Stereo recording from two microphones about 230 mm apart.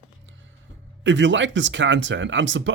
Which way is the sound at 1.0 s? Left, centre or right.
Right.